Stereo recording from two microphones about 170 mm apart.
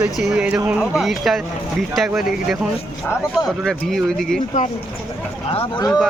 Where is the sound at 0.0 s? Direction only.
5° right (ahead or behind).